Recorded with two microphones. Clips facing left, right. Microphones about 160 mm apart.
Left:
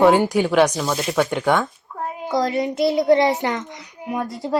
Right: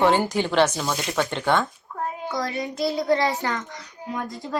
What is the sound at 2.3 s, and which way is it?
A child's voice, 25° left (ahead or behind).